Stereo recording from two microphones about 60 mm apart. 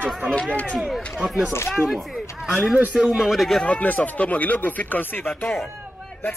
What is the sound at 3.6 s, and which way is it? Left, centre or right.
Speech, left.